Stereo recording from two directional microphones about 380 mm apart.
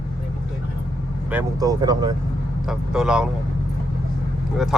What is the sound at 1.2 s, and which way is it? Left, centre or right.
Speech, centre.